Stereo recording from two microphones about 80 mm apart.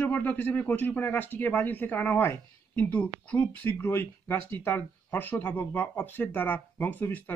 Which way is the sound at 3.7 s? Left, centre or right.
Left.